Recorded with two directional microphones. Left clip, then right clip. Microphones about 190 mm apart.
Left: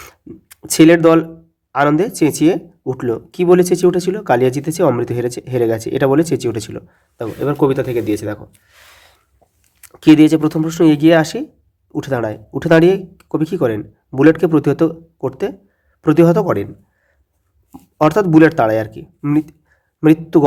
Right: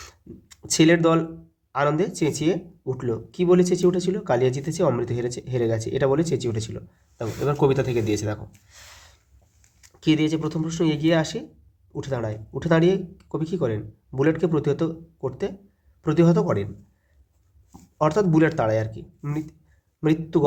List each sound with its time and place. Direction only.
0.0 s a sound: 35° left (ahead or behind)
1.7 s speech: 35° left (ahead or behind)
9.8 s speech: 45° left (ahead or behind)
17.7 s speech: 40° left (ahead or behind)